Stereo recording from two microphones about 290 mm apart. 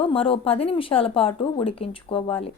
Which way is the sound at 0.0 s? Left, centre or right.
Centre.